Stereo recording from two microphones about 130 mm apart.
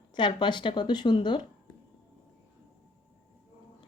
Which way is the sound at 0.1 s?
35° left (ahead or behind).